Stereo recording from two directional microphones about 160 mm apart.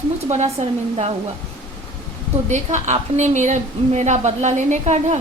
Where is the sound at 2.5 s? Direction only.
50° right (ahead or behind).